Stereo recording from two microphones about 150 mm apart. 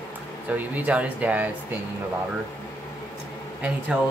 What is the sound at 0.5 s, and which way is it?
Speech, 10° right (ahead or behind).